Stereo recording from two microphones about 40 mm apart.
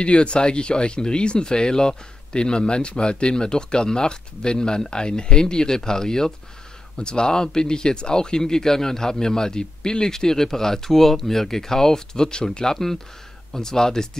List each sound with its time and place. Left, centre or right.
0.0 s speech: left